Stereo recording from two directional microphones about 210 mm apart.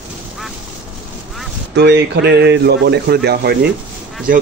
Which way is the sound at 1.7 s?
55° right (ahead or behind).